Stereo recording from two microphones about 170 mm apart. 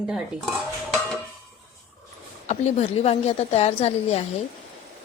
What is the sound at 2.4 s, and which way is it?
A woman's voice, 40° left (ahead or behind).